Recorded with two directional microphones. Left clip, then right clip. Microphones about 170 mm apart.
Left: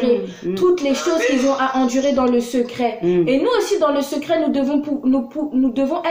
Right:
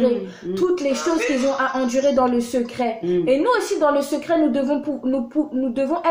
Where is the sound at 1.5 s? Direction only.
35° right (ahead or behind).